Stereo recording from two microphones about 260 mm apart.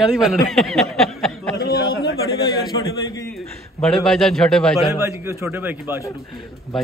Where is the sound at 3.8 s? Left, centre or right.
Centre.